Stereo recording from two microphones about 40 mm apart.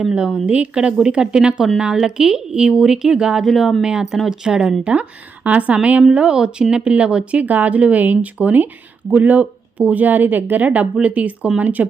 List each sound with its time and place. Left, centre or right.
0.1 s a woman's voice: right
3.4 s a woman's voice: centre
4.8 s speech: right
6.0 s speech: right
7.4 s speech: right